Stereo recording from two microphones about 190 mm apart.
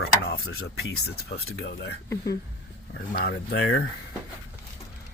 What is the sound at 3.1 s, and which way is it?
Speech, 60° left (ahead or behind).